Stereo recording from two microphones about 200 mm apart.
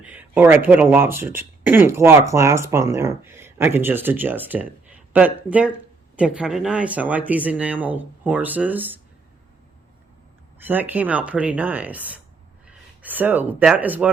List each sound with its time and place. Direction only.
0.0 s speech: 10° right (ahead or behind)
10.6 s speech: 10° right (ahead or behind)